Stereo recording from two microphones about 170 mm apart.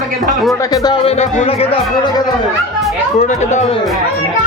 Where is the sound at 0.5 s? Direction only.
20° left (ahead or behind).